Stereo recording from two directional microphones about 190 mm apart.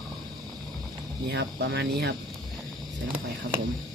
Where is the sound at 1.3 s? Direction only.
65° right (ahead or behind).